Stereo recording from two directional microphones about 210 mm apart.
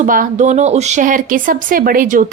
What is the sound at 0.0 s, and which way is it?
Speech, 40° right (ahead or behind).